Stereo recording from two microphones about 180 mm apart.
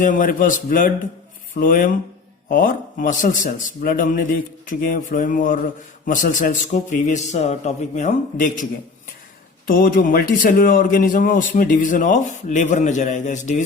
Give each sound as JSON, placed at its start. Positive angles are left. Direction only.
{"t": 0.0, "sound": "a man's voice", "side_deg": 50}
{"t": 9.6, "sound": "a man's voice", "side_deg": 50}